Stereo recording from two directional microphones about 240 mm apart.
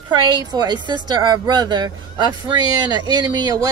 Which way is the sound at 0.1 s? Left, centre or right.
Centre.